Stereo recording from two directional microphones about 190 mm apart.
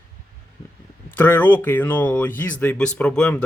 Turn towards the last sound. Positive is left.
turn(degrees=5)  # may be behind; listen again after turning